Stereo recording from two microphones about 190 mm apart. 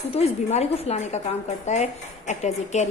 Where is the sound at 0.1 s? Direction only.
35° left (ahead or behind).